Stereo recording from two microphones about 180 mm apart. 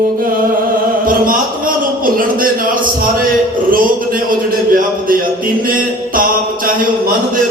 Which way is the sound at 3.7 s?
50° right (ahead or behind).